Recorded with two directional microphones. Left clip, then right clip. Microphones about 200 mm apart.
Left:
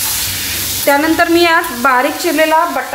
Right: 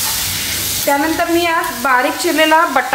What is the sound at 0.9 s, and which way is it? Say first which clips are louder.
Speech: left 4 dB; 40° left (ahead or behind).